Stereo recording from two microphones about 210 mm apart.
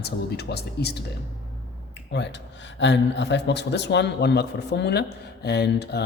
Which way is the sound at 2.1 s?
55° left (ahead or behind).